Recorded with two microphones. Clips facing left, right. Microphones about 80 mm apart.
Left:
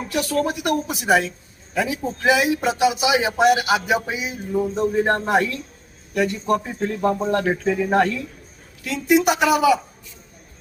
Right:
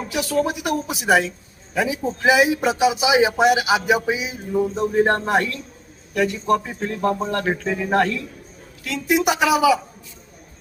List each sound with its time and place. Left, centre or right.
0.1 s a man's voice: centre